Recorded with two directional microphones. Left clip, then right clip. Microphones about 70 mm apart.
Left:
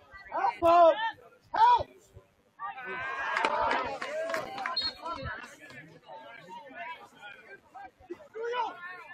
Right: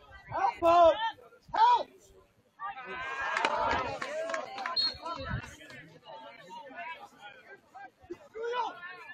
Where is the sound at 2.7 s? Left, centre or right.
Right.